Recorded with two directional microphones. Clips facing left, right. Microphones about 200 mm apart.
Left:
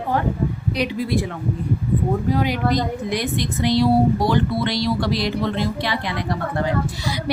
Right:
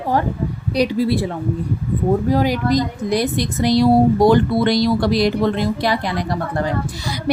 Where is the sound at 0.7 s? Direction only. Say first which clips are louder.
Right 7 dB; 35° right (ahead or behind).